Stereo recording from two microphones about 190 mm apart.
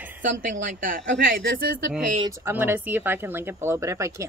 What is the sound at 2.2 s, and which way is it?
Speech, 15° right (ahead or behind).